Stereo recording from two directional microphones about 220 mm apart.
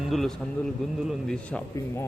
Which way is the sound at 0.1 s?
Centre (ahead or behind).